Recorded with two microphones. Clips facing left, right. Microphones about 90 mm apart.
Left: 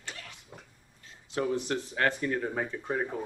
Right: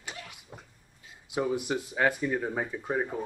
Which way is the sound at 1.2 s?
10° right (ahead or behind).